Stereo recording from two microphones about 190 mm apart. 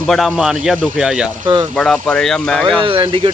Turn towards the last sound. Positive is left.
turn(degrees=-25)  # may be behind; listen again after turning